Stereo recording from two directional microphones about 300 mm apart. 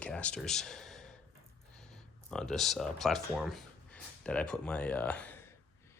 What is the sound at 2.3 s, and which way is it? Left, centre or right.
Speech, centre.